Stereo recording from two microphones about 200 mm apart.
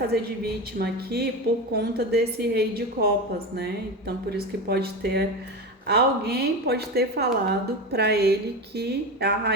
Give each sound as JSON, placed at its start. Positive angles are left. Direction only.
{"t": 0.1, "sound": "a woman's voice", "side_deg": -55}